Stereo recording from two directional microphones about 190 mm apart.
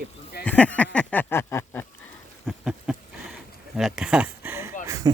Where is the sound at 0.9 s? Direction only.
10° left (ahead or behind).